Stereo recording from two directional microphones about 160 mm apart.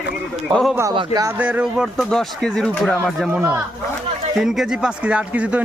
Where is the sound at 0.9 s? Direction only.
25° right (ahead or behind).